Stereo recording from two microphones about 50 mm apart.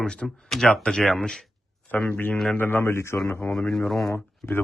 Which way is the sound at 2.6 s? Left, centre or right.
Left.